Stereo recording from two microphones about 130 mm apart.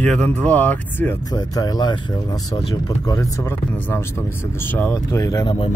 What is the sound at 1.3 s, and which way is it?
Speech, 30° left (ahead or behind).